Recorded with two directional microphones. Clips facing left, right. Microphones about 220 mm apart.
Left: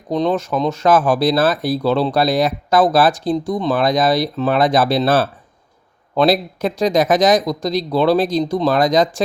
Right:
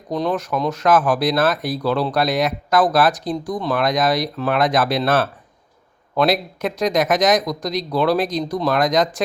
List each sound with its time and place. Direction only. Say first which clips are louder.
0.1 s speech: left 4 dB; 25° left (ahead or behind)